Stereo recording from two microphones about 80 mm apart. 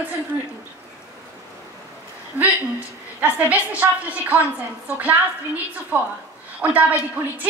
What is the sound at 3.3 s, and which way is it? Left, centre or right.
A woman's voice, centre.